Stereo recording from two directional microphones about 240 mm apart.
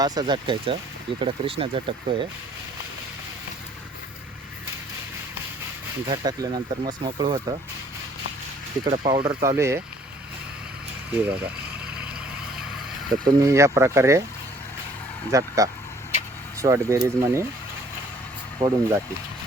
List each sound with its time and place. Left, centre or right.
0.0 s speech: centre
6.1 s speech: centre
8.8 s speech: centre
13.2 s speech: centre
15.3 s speech: centre
18.6 s speech: centre